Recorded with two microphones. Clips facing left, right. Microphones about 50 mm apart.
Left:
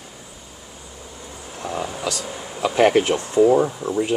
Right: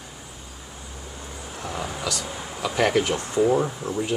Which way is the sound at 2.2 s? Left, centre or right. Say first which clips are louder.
Left 2 dB; centre.